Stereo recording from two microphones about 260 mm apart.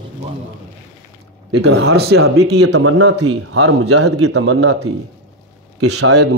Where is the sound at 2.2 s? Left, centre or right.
Right.